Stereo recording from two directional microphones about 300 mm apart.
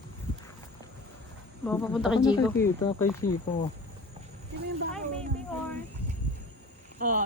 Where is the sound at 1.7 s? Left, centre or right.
Centre.